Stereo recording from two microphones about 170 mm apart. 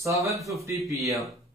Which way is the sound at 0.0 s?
20° right (ahead or behind).